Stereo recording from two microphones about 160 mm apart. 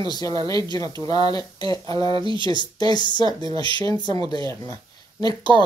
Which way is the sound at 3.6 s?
30° right (ahead or behind).